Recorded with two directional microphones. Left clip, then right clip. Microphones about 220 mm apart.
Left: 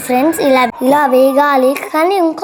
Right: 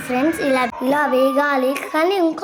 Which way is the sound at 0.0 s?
20° left (ahead or behind).